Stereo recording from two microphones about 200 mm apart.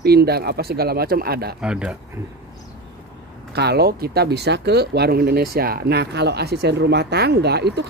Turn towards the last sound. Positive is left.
turn(degrees=-55)  # may be behind; listen again after turning